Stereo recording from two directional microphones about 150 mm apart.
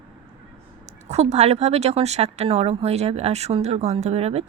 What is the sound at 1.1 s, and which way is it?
Speech, 45° right (ahead or behind).